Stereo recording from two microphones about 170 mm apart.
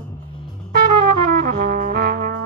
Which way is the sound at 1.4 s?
55° right (ahead or behind).